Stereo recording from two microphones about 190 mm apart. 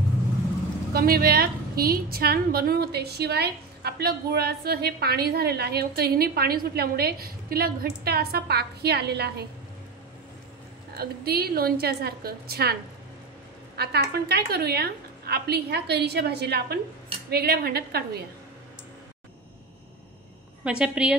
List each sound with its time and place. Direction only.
0.9 s a woman's voice: 50° right (ahead or behind)
11.0 s a woman's voice: 55° right (ahead or behind)
13.7 s a woman's voice: 55° right (ahead or behind)
20.6 s a woman's voice: 5° right (ahead or behind)